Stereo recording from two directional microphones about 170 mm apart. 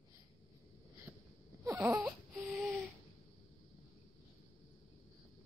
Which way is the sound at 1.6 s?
15° right (ahead or behind).